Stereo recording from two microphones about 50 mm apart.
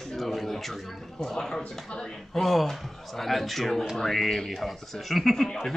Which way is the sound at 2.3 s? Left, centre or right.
Centre.